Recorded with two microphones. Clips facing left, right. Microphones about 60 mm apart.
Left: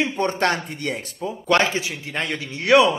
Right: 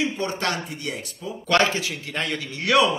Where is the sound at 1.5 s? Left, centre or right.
Left.